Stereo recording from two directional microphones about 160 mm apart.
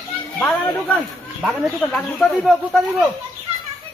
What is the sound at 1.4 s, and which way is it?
Speech, 5° right (ahead or behind).